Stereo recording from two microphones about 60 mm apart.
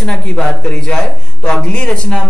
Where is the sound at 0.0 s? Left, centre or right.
Centre.